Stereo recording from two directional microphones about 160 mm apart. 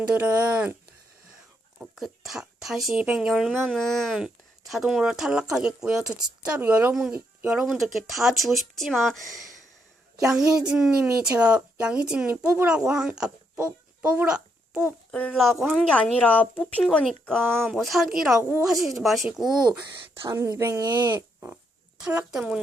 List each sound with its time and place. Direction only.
0.1 s speech: 10° right (ahead or behind)
1.8 s speech: centre (ahead or behind)
10.4 s speech: 25° right (ahead or behind)
10.7 s a child's voice: 5° right (ahead or behind)
15.1 s speech: 10° left (ahead or behind)
20.2 s speech: 20° right (ahead or behind)